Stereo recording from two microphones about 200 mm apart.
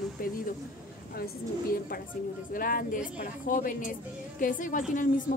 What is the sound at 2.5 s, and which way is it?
A woman's voice, 45° left (ahead or behind).